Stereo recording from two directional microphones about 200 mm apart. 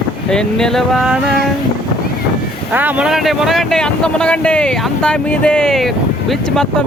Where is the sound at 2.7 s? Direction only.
10° right (ahead or behind).